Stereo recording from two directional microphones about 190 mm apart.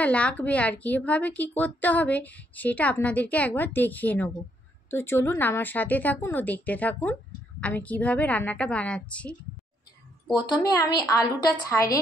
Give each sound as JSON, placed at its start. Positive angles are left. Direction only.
{"t": 0.0, "sound": "a woman's voice", "side_deg": 5}
{"t": 10.4, "sound": "a woman's voice", "side_deg": 20}